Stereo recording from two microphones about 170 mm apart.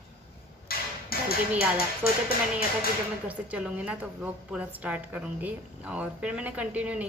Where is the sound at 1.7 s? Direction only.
60° left (ahead or behind).